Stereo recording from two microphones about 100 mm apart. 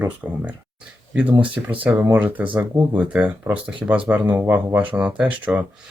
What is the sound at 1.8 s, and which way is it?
Speech, 20° right (ahead or behind).